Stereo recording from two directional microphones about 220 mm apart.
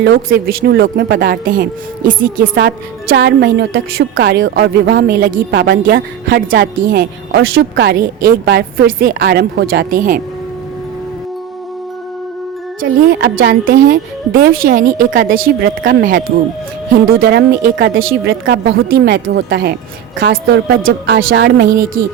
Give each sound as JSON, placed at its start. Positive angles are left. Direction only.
{"t": 0.0, "sound": "a woman's voice", "side_deg": -45}
{"t": 12.8, "sound": "a woman's voice", "side_deg": -50}